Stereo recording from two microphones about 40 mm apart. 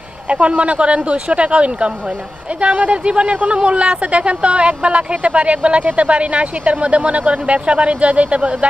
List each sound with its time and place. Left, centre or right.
0.3 s speech: right